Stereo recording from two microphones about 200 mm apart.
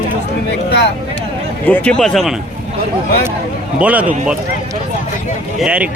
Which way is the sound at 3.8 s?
5° right (ahead or behind).